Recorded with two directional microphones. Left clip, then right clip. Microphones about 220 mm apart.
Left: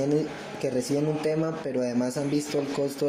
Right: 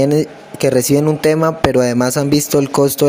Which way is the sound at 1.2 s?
45° right (ahead or behind).